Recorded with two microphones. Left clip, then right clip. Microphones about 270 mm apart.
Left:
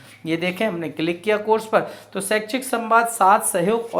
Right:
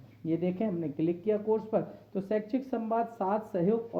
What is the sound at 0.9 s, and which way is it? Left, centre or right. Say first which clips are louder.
Speech: left 8 dB; centre.